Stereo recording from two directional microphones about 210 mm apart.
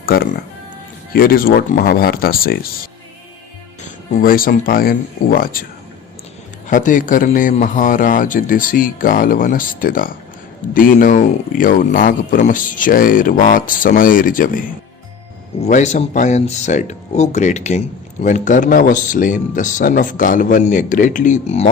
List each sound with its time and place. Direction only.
1.1 s speech: 45° left (ahead or behind)
4.1 s speech: 45° left (ahead or behind)
6.7 s speech: 40° left (ahead or behind)
15.6 s speech: 35° left (ahead or behind)